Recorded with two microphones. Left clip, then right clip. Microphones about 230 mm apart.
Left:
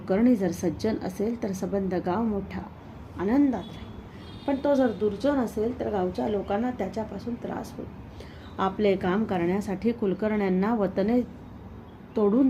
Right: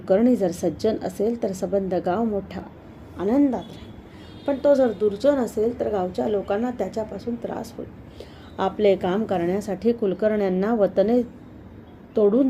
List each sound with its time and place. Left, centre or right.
0.0 s a woman's voice: centre